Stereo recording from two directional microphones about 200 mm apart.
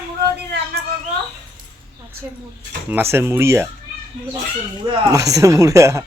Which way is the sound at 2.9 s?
10° right (ahead or behind).